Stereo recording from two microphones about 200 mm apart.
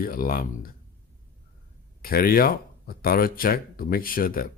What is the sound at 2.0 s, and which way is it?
Speech, 50° left (ahead or behind).